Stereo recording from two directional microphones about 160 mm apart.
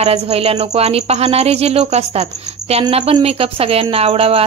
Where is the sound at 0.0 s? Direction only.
40° right (ahead or behind).